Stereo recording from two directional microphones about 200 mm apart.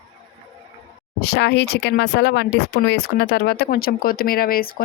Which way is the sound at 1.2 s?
60° left (ahead or behind).